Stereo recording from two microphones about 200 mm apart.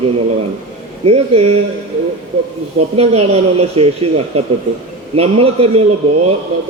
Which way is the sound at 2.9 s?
30° right (ahead or behind).